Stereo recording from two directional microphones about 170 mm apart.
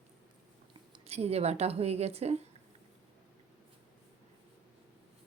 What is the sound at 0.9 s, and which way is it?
Speech, 40° right (ahead or behind).